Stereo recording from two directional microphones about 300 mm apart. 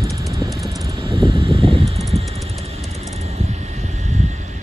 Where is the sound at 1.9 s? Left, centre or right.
Centre.